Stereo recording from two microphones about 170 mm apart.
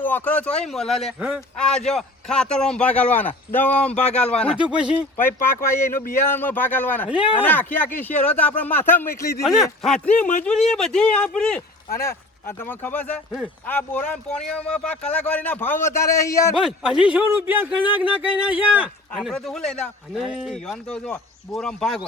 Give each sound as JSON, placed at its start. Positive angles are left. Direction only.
{"t": 0.0, "sound": "speech", "side_deg": 10}
{"t": 4.5, "sound": "speech", "side_deg": -5}
{"t": 5.2, "sound": "speech", "side_deg": 10}
{"t": 9.4, "sound": "speech", "side_deg": 0}
{"t": 16.6, "sound": "speech", "side_deg": -5}
{"t": 19.1, "sound": "speech", "side_deg": 5}